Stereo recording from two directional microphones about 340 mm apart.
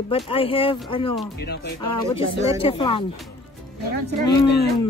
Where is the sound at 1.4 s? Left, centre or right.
Left.